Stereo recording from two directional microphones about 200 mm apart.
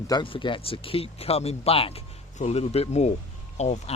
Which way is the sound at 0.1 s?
25° left (ahead or behind).